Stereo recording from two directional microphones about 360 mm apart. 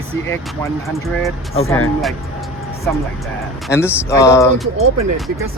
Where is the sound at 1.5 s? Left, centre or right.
Centre.